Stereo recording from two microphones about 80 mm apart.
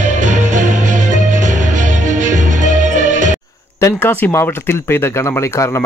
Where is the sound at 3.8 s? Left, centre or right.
Left.